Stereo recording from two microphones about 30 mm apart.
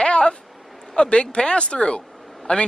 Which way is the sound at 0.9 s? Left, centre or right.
Left.